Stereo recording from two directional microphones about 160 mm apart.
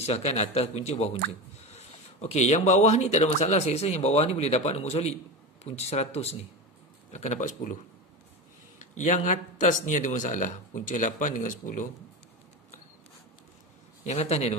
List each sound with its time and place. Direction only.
0.0 s a man's voice: 40° left (ahead or behind)
8.7 s speech: 50° left (ahead or behind)
14.0 s a man's voice: 40° left (ahead or behind)